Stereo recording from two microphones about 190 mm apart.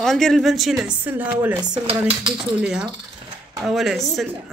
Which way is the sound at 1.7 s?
25° right (ahead or behind).